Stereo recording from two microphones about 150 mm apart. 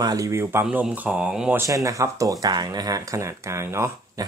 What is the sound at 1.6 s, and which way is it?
Speech, 20° right (ahead or behind).